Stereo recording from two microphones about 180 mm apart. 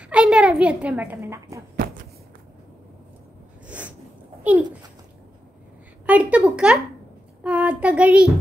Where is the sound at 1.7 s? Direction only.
55° right (ahead or behind).